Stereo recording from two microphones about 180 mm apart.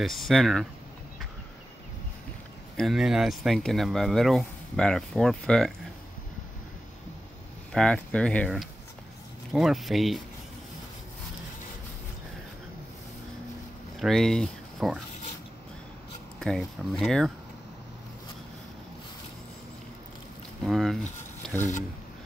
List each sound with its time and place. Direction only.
0.0 s speech: centre (ahead or behind)
2.8 s speech: centre (ahead or behind)
7.7 s speech: 5° left (ahead or behind)
13.9 s speech: centre (ahead or behind)
16.3 s speech: centre (ahead or behind)
20.6 s speech: centre (ahead or behind)